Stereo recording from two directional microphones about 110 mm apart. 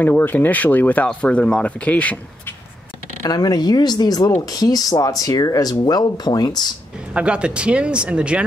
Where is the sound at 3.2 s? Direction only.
35° left (ahead or behind).